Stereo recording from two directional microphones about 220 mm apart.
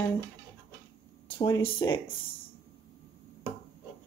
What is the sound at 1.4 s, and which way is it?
Speech, 20° left (ahead or behind).